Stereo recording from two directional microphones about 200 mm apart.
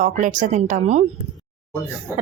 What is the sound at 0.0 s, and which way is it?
Speech, 40° right (ahead or behind).